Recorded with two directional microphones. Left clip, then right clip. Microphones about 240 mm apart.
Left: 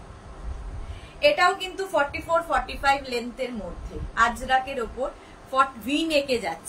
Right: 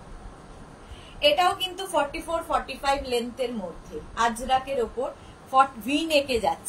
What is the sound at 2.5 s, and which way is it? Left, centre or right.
A woman's voice, centre.